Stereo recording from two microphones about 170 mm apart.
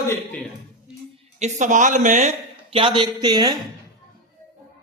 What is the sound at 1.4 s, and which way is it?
Speech, 45° right (ahead or behind).